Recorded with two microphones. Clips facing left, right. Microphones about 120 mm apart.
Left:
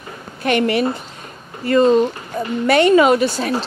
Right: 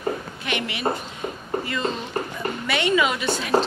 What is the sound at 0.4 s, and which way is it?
Speech, 45° left (ahead or behind).